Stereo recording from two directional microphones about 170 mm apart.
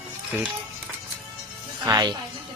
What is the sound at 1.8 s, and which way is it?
Speech, 25° right (ahead or behind).